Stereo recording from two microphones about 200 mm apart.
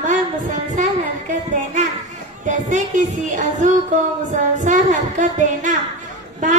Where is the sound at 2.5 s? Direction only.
40° right (ahead or behind).